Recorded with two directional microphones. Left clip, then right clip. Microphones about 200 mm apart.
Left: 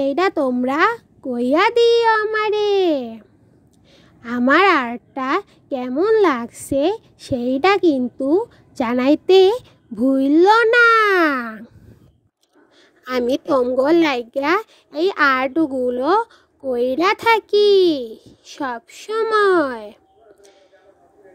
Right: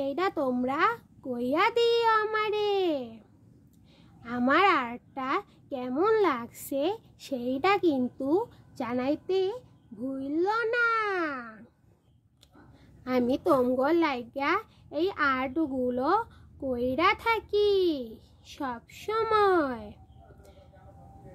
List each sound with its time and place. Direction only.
0.0 s speech: 30° left (ahead or behind)
8.8 s a woman's voice: 35° left (ahead or behind)
13.0 s a woman's voice: 35° left (ahead or behind)